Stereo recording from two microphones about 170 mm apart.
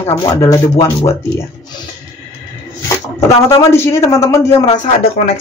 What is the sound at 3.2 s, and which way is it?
Speech, 15° left (ahead or behind).